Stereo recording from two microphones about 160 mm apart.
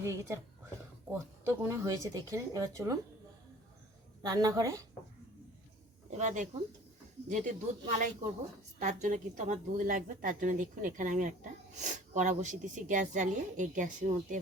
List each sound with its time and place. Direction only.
0.0 s speech: 15° right (ahead or behind)
4.3 s speech: 25° right (ahead or behind)
6.1 s a woman's voice: 50° right (ahead or behind)